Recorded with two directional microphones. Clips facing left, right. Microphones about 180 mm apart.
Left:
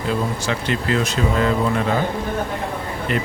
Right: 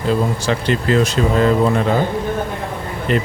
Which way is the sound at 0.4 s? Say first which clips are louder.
Right 4 dB; 35° right (ahead or behind).